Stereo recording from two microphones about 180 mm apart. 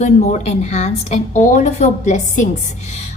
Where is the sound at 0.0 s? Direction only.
40° left (ahead or behind).